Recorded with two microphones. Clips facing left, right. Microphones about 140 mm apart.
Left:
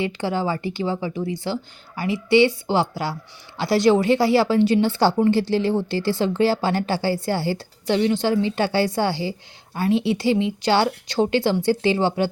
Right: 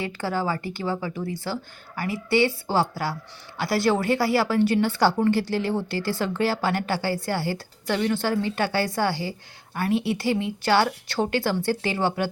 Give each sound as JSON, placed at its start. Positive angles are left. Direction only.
{"t": 0.0, "sound": "a woman's voice", "side_deg": 25}